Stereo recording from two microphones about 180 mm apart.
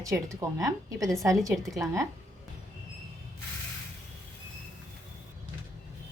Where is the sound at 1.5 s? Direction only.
Centre (ahead or behind).